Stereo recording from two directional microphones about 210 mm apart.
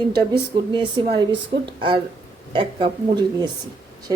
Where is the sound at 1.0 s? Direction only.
20° right (ahead or behind).